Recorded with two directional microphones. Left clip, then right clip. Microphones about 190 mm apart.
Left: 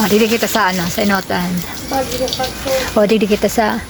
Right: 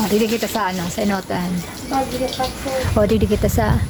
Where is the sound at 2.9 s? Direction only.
5° left (ahead or behind).